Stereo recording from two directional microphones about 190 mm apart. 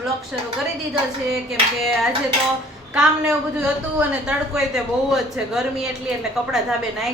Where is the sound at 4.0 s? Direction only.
5° right (ahead or behind).